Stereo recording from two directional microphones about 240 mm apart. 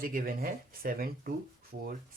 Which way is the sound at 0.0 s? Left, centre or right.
Right.